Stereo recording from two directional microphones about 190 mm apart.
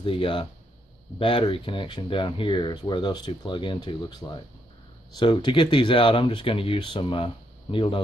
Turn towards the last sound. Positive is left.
turn(degrees=25)  # may be behind; listen again after turning